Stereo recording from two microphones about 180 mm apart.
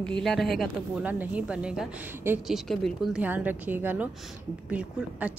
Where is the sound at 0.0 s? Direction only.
5° left (ahead or behind).